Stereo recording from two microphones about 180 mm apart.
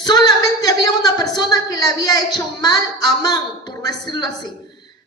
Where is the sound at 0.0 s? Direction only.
20° left (ahead or behind).